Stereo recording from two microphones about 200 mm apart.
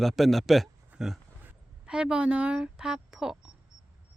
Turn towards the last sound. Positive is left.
turn(degrees=-5)  # may be behind; listen again after turning